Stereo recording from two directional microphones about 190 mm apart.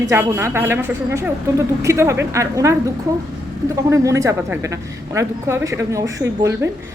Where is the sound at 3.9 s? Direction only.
15° right (ahead or behind).